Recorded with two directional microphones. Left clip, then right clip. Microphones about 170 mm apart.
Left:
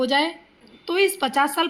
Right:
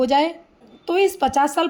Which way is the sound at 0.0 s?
40° right (ahead or behind).